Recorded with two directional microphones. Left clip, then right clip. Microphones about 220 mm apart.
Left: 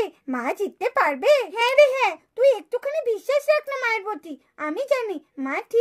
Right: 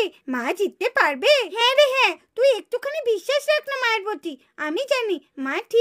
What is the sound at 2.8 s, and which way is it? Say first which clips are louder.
Speech: right 1 dB; 40° right (ahead or behind).